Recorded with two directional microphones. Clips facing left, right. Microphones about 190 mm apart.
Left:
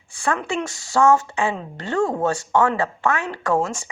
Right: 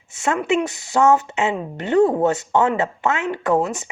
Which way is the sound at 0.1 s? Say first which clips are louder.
Right 4 dB; 20° right (ahead or behind).